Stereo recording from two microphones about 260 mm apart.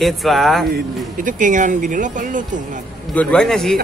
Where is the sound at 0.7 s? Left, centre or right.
Right.